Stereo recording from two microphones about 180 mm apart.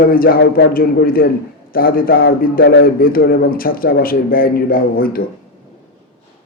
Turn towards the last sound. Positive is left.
turn(degrees=55)  # may be behind; listen again after turning